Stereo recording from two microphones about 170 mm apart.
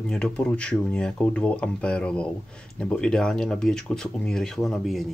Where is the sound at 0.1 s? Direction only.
5° left (ahead or behind).